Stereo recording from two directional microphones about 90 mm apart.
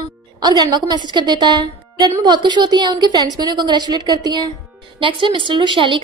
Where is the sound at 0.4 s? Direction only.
50° right (ahead or behind).